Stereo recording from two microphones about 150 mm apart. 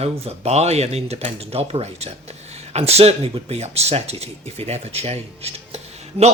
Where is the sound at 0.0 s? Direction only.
45° right (ahead or behind).